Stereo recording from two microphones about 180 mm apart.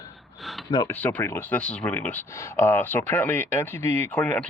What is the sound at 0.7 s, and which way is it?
Speech, 20° left (ahead or behind).